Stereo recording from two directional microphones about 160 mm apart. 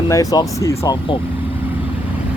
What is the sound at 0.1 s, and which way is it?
Speech, 20° left (ahead or behind).